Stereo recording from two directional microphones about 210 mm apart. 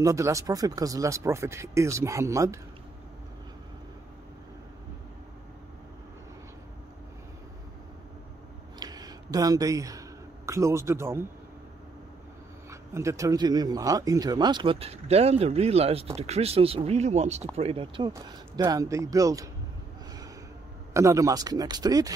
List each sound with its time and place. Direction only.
0.0 s speech: 15° right (ahead or behind)
8.7 s a sound: 20° right (ahead or behind)
12.9 s speech: 15° right (ahead or behind)
20.9 s speech: 15° right (ahead or behind)